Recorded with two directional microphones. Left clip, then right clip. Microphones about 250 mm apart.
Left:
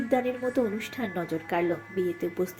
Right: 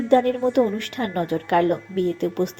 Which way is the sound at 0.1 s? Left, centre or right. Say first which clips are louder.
Right 9 dB; centre.